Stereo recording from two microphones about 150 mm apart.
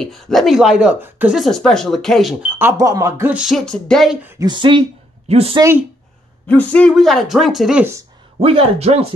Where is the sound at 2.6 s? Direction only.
20° right (ahead or behind).